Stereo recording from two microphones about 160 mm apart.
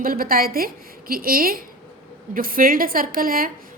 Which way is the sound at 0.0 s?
65° right (ahead or behind).